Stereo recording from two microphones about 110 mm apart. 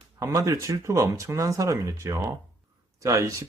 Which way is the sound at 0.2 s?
30° right (ahead or behind).